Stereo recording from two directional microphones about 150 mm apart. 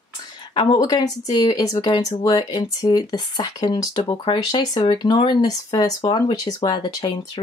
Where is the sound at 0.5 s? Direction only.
30° left (ahead or behind).